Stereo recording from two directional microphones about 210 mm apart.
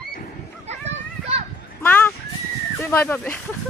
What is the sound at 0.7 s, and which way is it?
Children playing, 30° right (ahead or behind).